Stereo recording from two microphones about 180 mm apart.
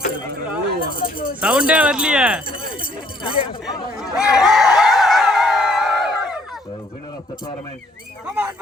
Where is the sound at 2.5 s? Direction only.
30° left (ahead or behind).